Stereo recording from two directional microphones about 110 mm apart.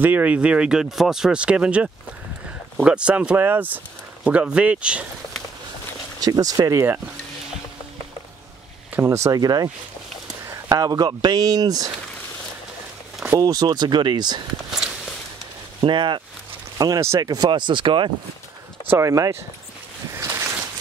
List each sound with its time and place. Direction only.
0.0 s speech: 15° right (ahead or behind)
6.2 s speech: 35° right (ahead or behind)
8.9 s speech: 25° right (ahead or behind)
10.7 s speech: 35° right (ahead or behind)
13.4 s speech: 35° right (ahead or behind)
14.7 s a sound: 5° right (ahead or behind)
15.8 s speech: 45° right (ahead or behind)
16.7 s speech: 35° right (ahead or behind)
17.3 s speech: 40° right (ahead or behind)
18.9 s speech: 25° right (ahead or behind)
20.2 s boat: 25° right (ahead or behind)